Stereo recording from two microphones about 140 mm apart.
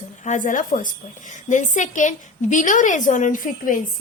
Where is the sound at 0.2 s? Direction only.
65° left (ahead or behind).